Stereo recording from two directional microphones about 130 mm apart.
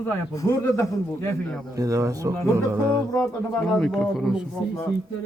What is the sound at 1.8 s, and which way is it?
Speech, 25° right (ahead or behind).